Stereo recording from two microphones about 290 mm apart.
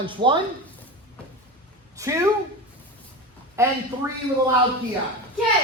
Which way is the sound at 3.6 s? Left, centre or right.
Centre.